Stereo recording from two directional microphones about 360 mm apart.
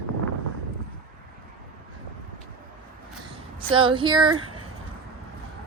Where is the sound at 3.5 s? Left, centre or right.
Centre.